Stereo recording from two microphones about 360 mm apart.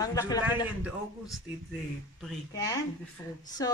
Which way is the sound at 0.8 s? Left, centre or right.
Centre.